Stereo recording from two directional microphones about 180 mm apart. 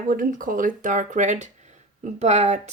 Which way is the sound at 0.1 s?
50° right (ahead or behind).